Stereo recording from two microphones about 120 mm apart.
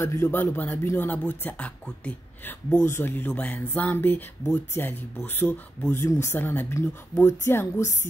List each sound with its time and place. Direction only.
0.0 s a woman's voice: 20° left (ahead or behind)